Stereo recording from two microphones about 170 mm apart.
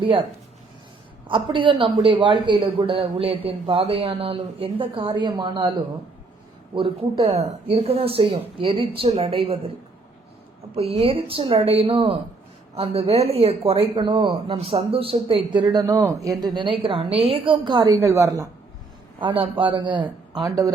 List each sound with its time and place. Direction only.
0.0 s speech: 30° right (ahead or behind)
1.3 s a man's voice: 30° right (ahead or behind)
6.7 s speech: 30° right (ahead or behind)
10.8 s a woman's voice: 35° right (ahead or behind); by 18.4 s 20° right (ahead or behind)
19.2 s a man's voice: 30° right (ahead or behind)